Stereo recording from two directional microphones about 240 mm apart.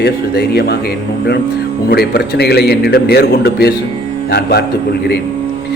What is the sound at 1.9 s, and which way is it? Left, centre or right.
A man's voice, left.